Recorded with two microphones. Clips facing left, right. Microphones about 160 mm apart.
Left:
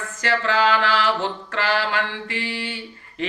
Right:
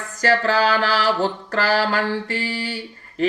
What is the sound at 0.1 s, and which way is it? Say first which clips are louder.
Mantra: right 4 dB; 40° right (ahead or behind).